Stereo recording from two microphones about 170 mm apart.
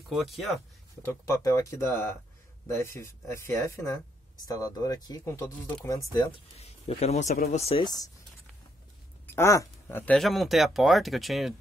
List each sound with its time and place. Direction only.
0.1 s speech: centre (ahead or behind)
1.0 s speech: 20° left (ahead or behind)
6.6 s speech: 40° left (ahead or behind)
7.8 s speech: 20° left (ahead or behind)
9.3 s speech: 15° left (ahead or behind); by 11.5 s centre (ahead or behind)